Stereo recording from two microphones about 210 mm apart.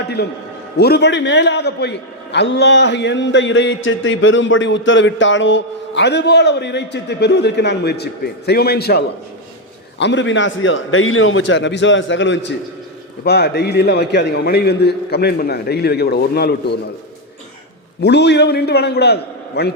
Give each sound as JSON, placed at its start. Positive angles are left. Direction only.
{"t": 0.2, "sound": "a man's voice", "side_deg": 50}
{"t": 18.0, "sound": "a man's voice", "side_deg": 55}